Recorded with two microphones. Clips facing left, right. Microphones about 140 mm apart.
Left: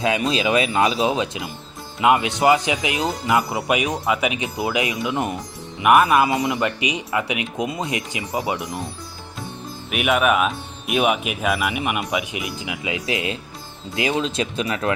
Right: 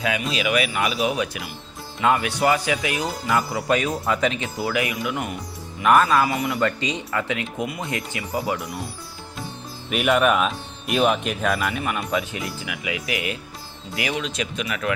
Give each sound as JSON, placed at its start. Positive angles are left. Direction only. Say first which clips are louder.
{"t": 0.0, "sound": "speech", "louder": "left 4 dB", "side_deg": 30}
{"t": 3.7, "sound": "speech", "louder": "even", "side_deg": 10}
{"t": 9.9, "sound": "speech", "louder": "even", "side_deg": 5}